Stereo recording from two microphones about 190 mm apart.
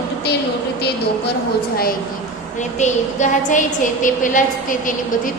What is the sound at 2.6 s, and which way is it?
A woman's voice, 40° left (ahead or behind).